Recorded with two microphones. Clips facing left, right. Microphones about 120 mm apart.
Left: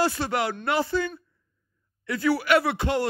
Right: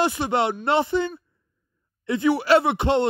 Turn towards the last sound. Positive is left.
turn(degrees=-25)  # may be behind; listen again after turning